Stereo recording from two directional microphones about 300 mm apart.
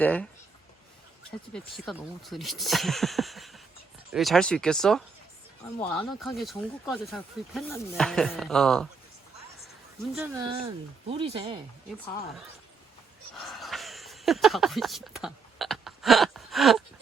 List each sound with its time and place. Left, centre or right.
0.0 s speech: centre
1.5 s speech: centre
10.2 s speech: centre
13.3 s a sound: centre